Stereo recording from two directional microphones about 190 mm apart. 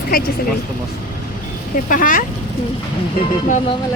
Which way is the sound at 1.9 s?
45° left (ahead or behind).